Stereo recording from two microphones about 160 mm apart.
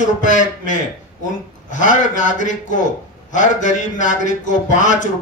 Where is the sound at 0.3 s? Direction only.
50° left (ahead or behind).